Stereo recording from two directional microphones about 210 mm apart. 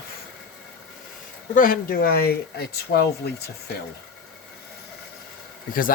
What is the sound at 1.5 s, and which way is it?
Speech, 40° left (ahead or behind).